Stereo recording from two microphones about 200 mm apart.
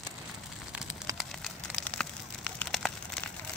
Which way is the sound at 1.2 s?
5° left (ahead or behind).